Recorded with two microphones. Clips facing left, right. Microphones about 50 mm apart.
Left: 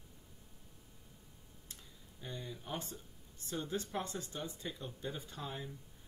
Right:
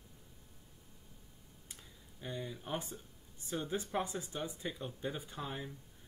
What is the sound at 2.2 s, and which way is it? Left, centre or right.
Speech, centre.